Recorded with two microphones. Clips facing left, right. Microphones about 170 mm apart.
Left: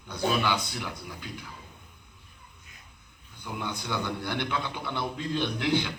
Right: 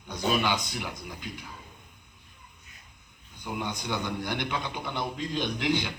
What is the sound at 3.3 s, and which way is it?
A man's voice, 15° right (ahead or behind).